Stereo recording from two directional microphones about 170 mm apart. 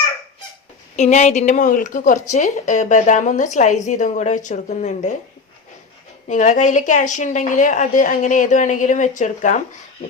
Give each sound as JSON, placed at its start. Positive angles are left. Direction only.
{"t": 0.9, "sound": "a woman's voice", "side_deg": 40}
{"t": 6.2, "sound": "a woman's voice", "side_deg": 45}